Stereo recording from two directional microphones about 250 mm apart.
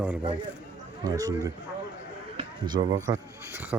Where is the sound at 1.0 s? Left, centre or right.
Centre.